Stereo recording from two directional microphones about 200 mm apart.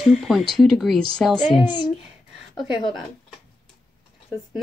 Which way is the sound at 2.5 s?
25° left (ahead or behind).